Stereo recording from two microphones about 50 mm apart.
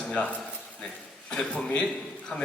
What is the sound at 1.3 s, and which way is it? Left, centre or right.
A man's voice, centre.